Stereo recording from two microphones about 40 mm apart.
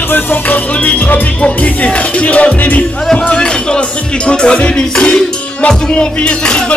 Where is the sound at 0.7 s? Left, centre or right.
Left.